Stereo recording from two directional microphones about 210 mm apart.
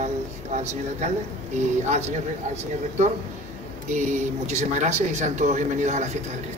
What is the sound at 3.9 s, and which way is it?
Speech, 35° right (ahead or behind).